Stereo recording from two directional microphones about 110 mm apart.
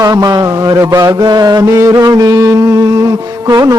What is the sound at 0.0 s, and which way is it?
Music, 35° right (ahead or behind).